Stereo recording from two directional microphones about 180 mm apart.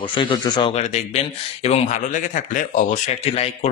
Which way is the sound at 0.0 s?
30° left (ahead or behind).